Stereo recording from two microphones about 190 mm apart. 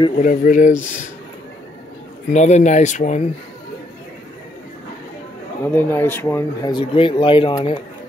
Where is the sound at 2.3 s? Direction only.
35° left (ahead or behind).